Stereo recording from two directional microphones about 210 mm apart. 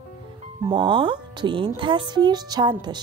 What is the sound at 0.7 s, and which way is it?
Speech, 25° right (ahead or behind).